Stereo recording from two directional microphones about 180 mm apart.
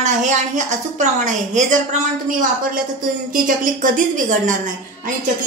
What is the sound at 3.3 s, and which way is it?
A woman's voice, 45° right (ahead or behind).